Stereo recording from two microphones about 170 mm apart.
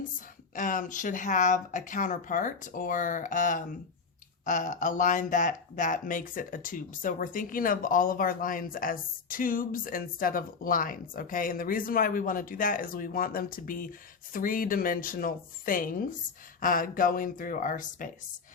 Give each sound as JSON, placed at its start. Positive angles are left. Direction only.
{"t": 0.5, "sound": "speech", "side_deg": 50}